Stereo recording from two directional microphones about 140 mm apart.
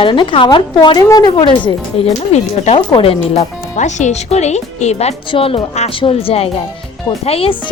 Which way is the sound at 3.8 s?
60° left (ahead or behind).